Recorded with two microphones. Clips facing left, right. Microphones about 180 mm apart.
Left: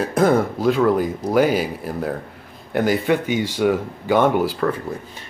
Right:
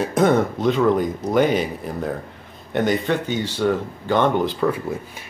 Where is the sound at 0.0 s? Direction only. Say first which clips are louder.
Even; 5° left (ahead or behind).